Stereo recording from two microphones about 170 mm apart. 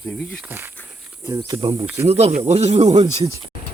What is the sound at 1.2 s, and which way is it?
Speech, 25° right (ahead or behind).